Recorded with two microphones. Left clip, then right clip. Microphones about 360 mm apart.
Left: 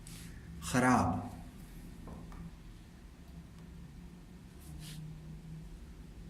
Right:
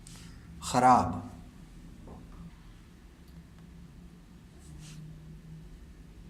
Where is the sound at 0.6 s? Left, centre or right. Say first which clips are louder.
Right 8 dB; centre.